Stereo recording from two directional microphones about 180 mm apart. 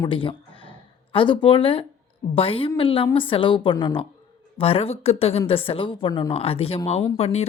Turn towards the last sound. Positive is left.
turn(degrees=35)  # may be behind; listen again after turning